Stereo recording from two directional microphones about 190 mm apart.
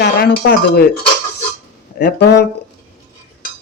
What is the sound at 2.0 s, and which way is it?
Music, 60° left (ahead or behind).